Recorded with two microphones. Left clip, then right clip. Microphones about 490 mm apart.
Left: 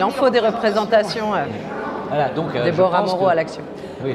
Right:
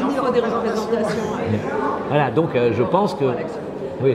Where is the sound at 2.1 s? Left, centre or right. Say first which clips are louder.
Right 2 dB; right.